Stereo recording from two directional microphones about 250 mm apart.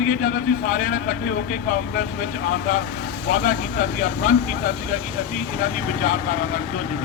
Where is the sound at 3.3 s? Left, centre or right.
Left.